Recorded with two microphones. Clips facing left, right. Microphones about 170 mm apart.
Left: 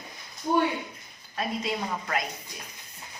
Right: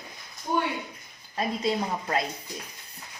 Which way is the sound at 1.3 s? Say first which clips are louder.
Right 3 dB; 30° right (ahead or behind).